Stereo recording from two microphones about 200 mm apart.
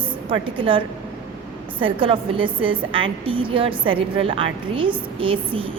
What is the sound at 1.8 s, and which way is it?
A woman's voice, 25° right (ahead or behind).